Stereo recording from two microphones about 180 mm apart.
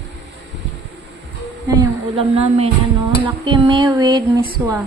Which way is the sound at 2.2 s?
35° right (ahead or behind).